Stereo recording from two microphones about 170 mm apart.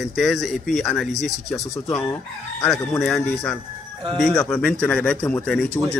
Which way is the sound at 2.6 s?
15° left (ahead or behind).